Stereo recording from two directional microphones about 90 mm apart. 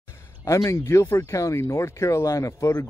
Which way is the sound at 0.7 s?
30° left (ahead or behind).